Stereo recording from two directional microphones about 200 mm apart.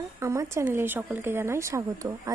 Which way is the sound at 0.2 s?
15° right (ahead or behind).